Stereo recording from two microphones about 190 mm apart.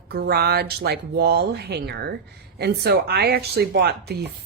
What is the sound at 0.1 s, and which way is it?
Speech, 55° right (ahead or behind).